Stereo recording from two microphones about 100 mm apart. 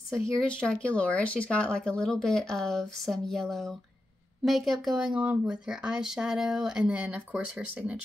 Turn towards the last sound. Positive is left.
turn(degrees=-15)  # may be behind; listen again after turning